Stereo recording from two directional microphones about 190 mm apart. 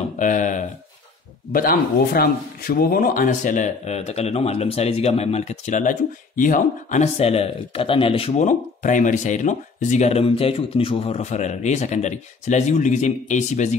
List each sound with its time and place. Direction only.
0.2 s speech: 40° left (ahead or behind)